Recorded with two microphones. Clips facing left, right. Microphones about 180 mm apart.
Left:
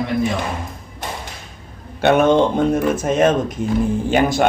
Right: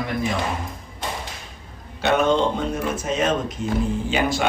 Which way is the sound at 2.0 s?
55° left (ahead or behind).